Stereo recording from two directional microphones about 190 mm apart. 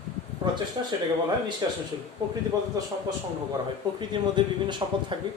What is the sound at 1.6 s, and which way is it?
Speech, 20° right (ahead or behind).